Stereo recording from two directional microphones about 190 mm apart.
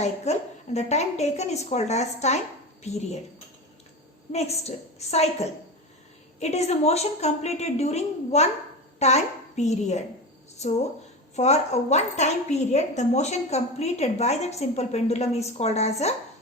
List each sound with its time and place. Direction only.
0.0 s a woman's voice: 35° left (ahead or behind)
4.3 s a woman's voice: 35° left (ahead or behind)